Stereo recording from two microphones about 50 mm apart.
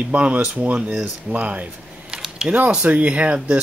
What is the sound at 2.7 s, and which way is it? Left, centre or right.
Speech, right.